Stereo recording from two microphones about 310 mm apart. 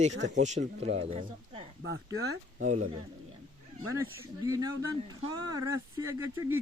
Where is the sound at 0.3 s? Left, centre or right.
Right.